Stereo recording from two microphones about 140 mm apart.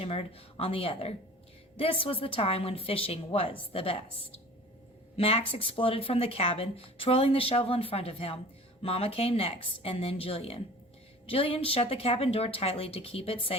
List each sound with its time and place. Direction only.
0.0 s speech: 45° left (ahead or behind)